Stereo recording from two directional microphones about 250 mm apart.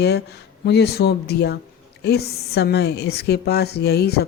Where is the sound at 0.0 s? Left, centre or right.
Left.